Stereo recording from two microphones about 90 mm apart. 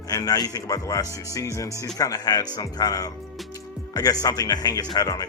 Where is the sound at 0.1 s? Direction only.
45° left (ahead or behind).